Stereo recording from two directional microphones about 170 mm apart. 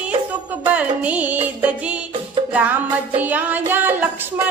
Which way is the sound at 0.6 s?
10° right (ahead or behind).